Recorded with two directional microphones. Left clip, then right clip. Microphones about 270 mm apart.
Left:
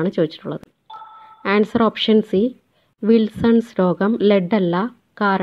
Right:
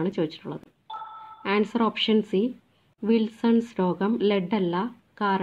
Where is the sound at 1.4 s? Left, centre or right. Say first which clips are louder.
Left 7 dB; left.